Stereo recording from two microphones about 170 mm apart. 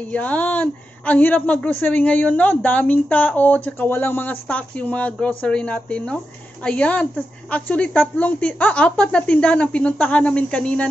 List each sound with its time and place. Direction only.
0.1 s a woman's voice: 10° left (ahead or behind)